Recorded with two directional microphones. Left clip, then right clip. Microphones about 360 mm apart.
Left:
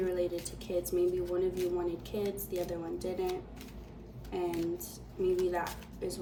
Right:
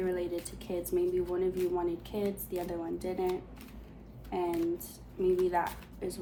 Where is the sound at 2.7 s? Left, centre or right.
Centre.